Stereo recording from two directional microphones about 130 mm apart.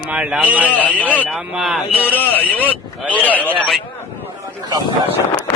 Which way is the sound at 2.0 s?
15° left (ahead or behind).